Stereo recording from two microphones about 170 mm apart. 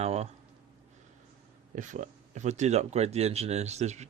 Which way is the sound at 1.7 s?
45° right (ahead or behind).